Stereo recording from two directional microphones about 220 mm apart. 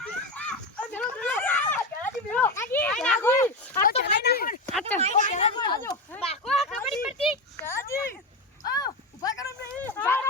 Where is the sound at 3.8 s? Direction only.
40° left (ahead or behind).